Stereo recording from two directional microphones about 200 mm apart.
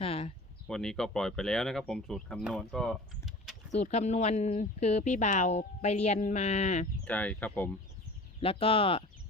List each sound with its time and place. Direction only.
0.0 s a sound: 30° left (ahead or behind)
0.7 s speech: 5° left (ahead or behind)
3.8 s speech: 35° left (ahead or behind)
7.0 s speech: 5° left (ahead or behind)
8.4 s speech: 25° left (ahead or behind)